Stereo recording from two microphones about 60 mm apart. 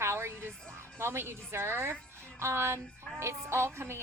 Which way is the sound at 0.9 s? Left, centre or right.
Right.